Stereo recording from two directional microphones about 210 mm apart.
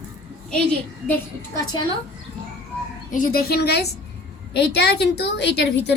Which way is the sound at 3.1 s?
40° left (ahead or behind).